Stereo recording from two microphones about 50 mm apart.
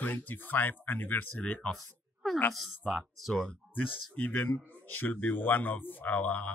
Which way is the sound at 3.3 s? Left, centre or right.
Left.